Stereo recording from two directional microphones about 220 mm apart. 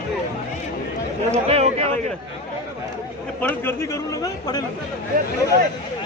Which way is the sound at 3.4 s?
10° left (ahead or behind).